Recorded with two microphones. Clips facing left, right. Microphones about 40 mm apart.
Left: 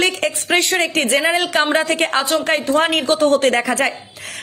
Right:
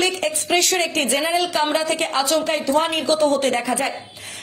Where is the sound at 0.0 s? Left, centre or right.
Left.